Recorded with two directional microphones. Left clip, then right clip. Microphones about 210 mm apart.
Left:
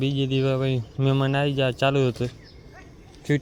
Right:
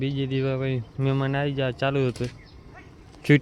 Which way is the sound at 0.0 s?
10° left (ahead or behind).